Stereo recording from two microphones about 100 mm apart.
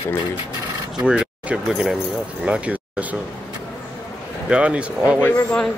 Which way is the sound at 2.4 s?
15° right (ahead or behind).